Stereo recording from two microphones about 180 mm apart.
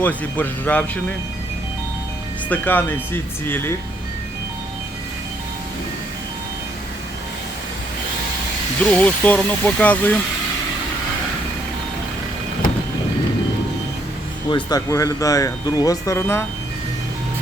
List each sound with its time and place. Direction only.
0.0 s speech: 10° left (ahead or behind)
2.5 s speech: 10° left (ahead or behind)
8.8 s speech: 5° left (ahead or behind)
14.5 s speech: 20° left (ahead or behind)